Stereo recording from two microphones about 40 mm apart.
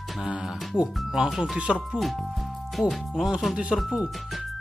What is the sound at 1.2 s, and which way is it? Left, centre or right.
Music, centre.